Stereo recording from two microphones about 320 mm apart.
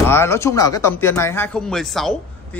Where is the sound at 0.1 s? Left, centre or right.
Centre.